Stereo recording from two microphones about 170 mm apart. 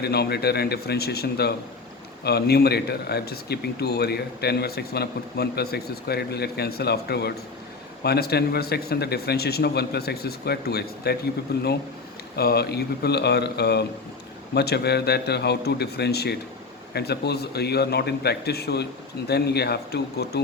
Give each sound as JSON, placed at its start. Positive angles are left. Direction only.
{"t": 0.0, "sound": "speech", "side_deg": 70}